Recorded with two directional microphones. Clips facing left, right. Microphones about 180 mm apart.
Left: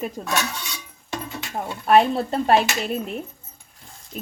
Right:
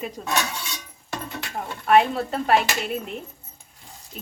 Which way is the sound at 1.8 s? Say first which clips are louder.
Left 2 dB; 35° left (ahead or behind).